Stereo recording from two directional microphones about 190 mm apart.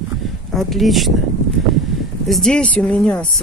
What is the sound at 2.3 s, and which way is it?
Speech, 5° left (ahead or behind).